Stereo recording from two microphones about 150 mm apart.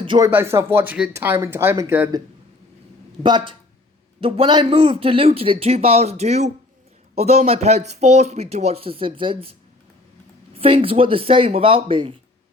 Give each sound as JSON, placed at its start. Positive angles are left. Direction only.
{"t": 0.0, "sound": "speech", "side_deg": -35}
{"t": 0.3, "sound": "speech", "side_deg": -15}
{"t": 3.2, "sound": "speech", "side_deg": -30}